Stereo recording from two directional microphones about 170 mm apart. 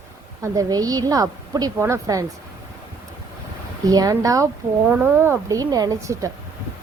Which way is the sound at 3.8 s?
20° right (ahead or behind).